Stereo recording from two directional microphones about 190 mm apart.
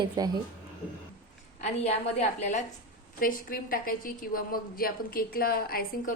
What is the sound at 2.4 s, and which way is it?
A woman's voice, 40° left (ahead or behind).